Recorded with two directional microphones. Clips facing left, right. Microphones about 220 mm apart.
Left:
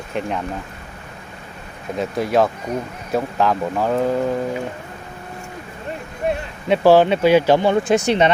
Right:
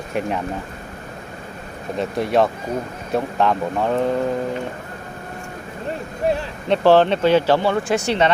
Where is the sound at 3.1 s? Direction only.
Centre (ahead or behind).